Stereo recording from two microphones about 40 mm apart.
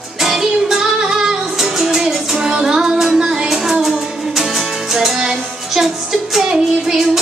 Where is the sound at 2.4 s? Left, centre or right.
Centre.